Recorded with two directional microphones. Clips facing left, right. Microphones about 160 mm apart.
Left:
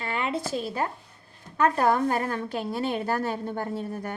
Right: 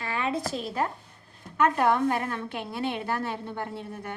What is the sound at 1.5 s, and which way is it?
A woman's voice, 35° left (ahead or behind).